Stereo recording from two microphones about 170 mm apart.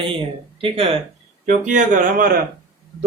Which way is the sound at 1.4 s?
50° right (ahead or behind).